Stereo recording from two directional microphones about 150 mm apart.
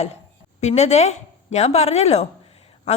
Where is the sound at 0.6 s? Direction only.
45° left (ahead or behind).